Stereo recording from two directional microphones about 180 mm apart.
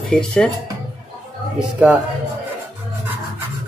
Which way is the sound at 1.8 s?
5° right (ahead or behind).